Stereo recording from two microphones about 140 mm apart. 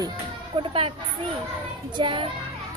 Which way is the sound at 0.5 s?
40° right (ahead or behind).